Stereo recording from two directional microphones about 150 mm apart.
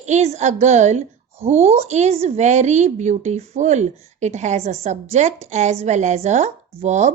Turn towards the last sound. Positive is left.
turn(degrees=-50)  # may be behind; listen again after turning